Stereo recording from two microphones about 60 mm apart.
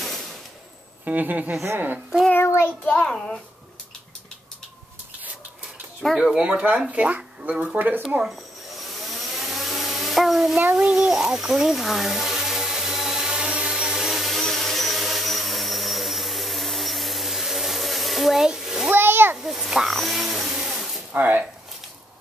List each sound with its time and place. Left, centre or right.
1.0 s speech: right
2.3 s a child's voice: left
2.8 s a child's voice: left
3.1 s a child's voice: centre
6.0 s speech: centre
6.3 s speech: right
8.8 s a sound: centre
10.6 s speech: right
11.1 s a sound: centre
18.9 s a sound: right
19.4 s a sound: centre
21.1 s speech: right